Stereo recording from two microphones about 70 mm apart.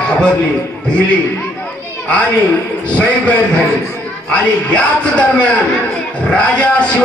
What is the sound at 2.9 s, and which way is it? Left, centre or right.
A man's voice, centre.